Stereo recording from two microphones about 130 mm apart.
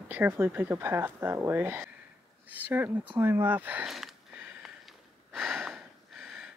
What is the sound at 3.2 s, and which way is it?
Speech, 15° right (ahead or behind).